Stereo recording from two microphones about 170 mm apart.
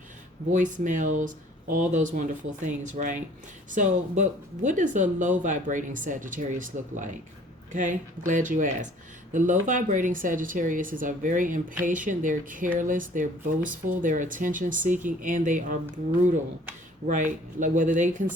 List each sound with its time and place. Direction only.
0.5 s speech: 50° right (ahead or behind)
17.1 s speech: 45° right (ahead or behind)